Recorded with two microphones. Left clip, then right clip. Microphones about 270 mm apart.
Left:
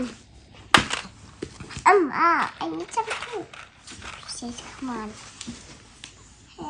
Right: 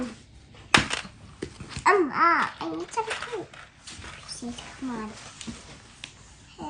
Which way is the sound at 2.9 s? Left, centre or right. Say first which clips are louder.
Left 2 dB; centre.